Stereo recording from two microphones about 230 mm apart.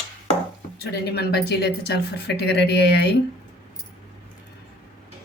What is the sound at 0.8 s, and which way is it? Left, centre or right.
A woman's voice, left.